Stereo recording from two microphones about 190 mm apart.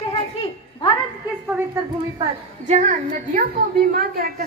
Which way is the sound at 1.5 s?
10° right (ahead or behind).